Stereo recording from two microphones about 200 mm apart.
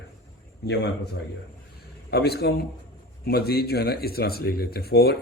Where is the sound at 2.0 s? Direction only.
55° left (ahead or behind).